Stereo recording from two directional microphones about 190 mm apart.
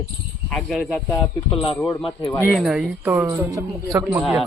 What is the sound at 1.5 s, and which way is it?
Speech, 25° left (ahead or behind).